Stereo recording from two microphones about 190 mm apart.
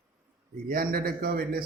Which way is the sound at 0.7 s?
50° right (ahead or behind).